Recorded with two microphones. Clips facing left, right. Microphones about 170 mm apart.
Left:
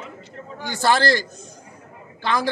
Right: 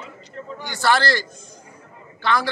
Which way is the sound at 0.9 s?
45° left (ahead or behind).